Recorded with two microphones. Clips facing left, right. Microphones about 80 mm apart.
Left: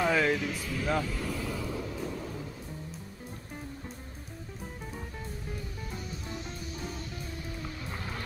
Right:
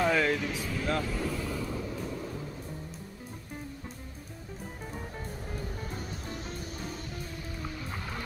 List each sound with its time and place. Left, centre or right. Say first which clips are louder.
0.0 s vehicle: even; centre
5.8 s music: right 1 dB; right